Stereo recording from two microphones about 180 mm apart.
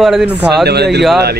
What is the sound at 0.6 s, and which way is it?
Speech, 65° right (ahead or behind).